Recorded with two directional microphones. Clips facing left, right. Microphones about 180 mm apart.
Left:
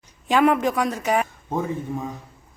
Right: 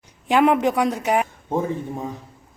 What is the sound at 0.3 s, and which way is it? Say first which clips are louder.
A woman's voice: right 1 dB; 15° right (ahead or behind).